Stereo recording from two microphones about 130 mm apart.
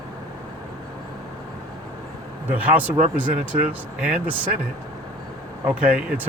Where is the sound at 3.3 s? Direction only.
90° right.